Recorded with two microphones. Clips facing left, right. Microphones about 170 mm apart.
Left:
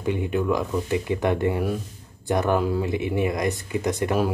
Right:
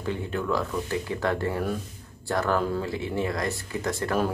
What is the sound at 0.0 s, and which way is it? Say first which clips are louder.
Speech: left 5 dB; 15° left (ahead or behind).